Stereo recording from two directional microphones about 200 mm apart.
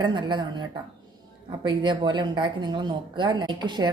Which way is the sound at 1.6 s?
25° right (ahead or behind).